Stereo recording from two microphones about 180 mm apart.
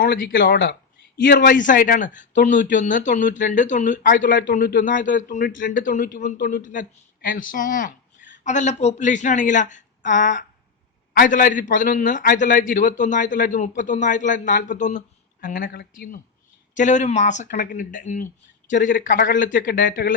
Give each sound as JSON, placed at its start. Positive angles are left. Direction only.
{"t": 0.6, "sound": "speech", "side_deg": 80}
{"t": 1.6, "sound": "a man's voice", "side_deg": 50}